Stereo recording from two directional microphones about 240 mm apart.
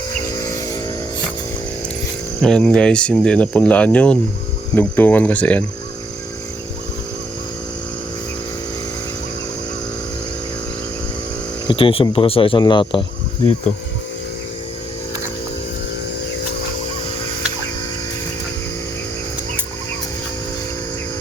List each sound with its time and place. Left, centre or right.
2.4 s speech: centre
11.7 s speech: left